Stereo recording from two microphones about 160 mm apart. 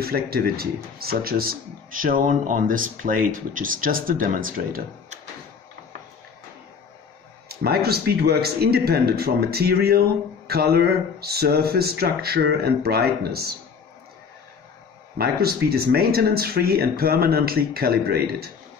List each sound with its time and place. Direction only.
0.0 s speech: 75° right (ahead or behind)
7.4 s speech: 75° right (ahead or behind)
15.1 s speech: 70° right (ahead or behind)